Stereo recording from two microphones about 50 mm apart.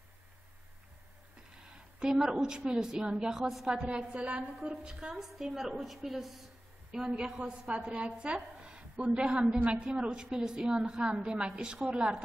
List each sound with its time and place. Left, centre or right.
1.7 s a sound: centre
2.1 s a woman's voice: centre
3.7 s a woman's voice: centre
5.1 s a woman's voice: centre
6.9 s a woman's voice: centre
8.6 s a sound: centre
9.2 s a woman's voice: centre
10.6 s a woman's voice: centre